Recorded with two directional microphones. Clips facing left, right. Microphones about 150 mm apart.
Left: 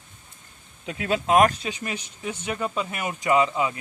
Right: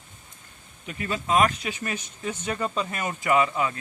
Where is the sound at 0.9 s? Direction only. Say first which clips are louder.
Left 4 dB; 90° left; by 1.5 s 65° left (ahead or behind).